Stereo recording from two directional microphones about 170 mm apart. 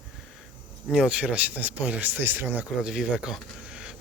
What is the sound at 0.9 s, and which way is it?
Speech, 5° right (ahead or behind).